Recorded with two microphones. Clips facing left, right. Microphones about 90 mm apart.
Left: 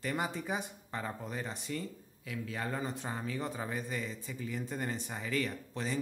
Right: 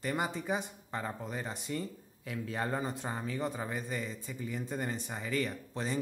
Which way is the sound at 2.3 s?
35° right (ahead or behind).